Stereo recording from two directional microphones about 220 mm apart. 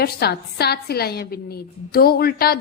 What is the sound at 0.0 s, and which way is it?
A woman's voice, 45° left (ahead or behind).